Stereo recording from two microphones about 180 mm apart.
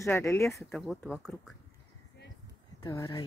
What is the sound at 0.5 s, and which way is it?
Speech, centre (ahead or behind).